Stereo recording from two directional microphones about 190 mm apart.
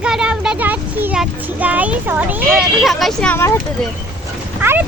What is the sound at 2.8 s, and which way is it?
Speech, centre (ahead or behind).